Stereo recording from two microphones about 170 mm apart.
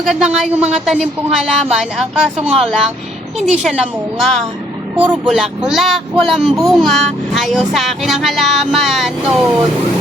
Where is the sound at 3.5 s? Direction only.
Centre (ahead or behind).